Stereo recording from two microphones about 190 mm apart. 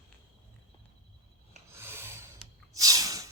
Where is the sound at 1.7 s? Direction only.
10° right (ahead or behind).